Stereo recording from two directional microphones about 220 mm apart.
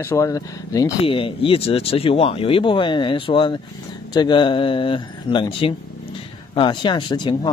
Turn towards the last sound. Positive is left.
turn(degrees=20)  # may be behind; listen again after turning